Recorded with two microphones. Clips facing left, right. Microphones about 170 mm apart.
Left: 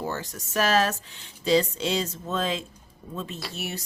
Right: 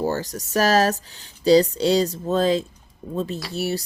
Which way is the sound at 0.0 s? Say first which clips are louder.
Right 8 dB; 35° right (ahead or behind).